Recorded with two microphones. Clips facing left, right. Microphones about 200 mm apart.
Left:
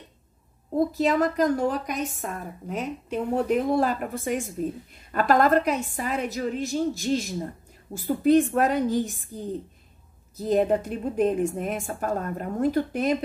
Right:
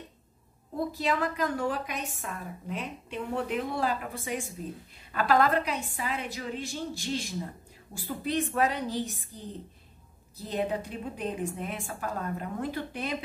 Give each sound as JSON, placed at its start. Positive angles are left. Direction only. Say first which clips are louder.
{"t": 0.7, "sound": "a woman's voice", "louder": "left 7 dB", "side_deg": 45}